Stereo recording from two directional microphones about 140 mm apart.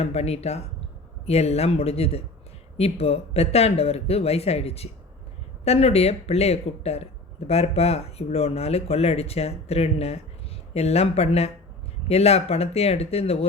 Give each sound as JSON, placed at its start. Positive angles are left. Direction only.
{"t": 0.0, "sound": "speech", "side_deg": 45}